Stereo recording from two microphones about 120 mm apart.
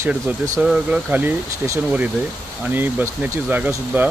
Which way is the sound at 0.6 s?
5° right (ahead or behind).